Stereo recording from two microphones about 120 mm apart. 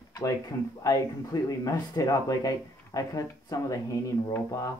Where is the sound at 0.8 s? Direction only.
30° left (ahead or behind).